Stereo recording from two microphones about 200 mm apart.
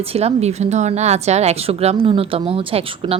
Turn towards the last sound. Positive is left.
turn(degrees=-25)  # may be behind; listen again after turning